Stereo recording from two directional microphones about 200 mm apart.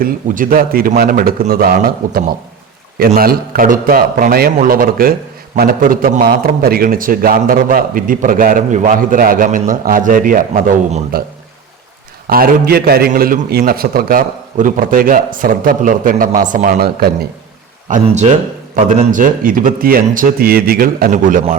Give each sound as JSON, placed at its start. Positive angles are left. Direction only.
{"t": 0.0, "sound": "a man's voice", "side_deg": -45}
{"t": 12.3, "sound": "a man's voice", "side_deg": -50}
{"t": 17.8, "sound": "a man's voice", "side_deg": -35}